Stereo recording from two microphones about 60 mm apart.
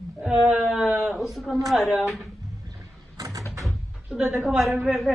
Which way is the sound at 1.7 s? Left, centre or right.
Centre.